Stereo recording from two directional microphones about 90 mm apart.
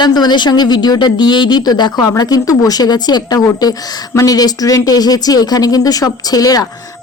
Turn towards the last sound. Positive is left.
turn(degrees=45)  # may be behind; listen again after turning